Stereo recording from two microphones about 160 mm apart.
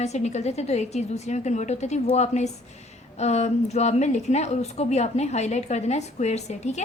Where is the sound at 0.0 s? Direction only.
45° left (ahead or behind).